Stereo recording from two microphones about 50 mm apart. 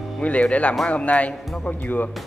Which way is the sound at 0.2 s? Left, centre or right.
Left.